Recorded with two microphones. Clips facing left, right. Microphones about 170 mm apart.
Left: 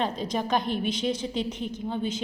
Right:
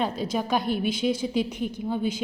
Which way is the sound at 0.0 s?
5° right (ahead or behind).